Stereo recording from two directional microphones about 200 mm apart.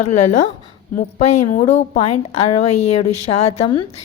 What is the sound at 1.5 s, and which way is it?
A woman's voice, 35° left (ahead or behind).